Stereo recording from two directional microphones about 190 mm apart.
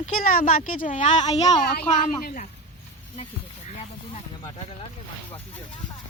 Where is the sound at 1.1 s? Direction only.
30° left (ahead or behind).